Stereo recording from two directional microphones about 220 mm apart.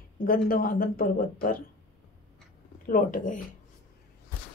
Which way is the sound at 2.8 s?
35° left (ahead or behind).